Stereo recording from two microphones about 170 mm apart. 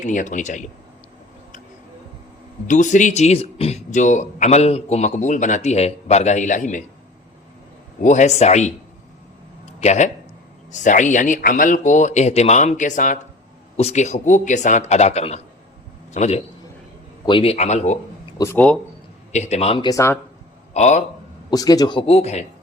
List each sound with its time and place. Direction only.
0.0 s speech: 50° left (ahead or behind)
2.6 s speech: 45° left (ahead or behind)
8.0 s speech: 45° left (ahead or behind)
9.8 s speech: 45° left (ahead or behind)
18.3 s speech: 15° left (ahead or behind)
19.3 s speech: 40° left (ahead or behind)
19.9 s speech: 15° left (ahead or behind)
20.7 s speech: 45° left (ahead or behind)
21.5 s a man's voice: 20° left (ahead or behind); by 22.4 s 40° left (ahead or behind)